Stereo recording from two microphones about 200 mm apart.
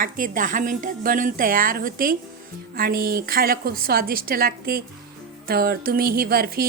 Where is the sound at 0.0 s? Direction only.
45° right (ahead or behind).